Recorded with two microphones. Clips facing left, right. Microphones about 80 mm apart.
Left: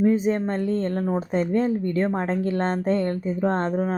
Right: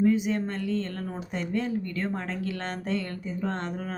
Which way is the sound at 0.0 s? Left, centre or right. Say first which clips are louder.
Left 4 dB; left.